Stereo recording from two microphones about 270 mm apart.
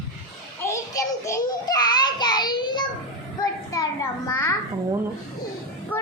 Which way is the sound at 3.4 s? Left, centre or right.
Centre.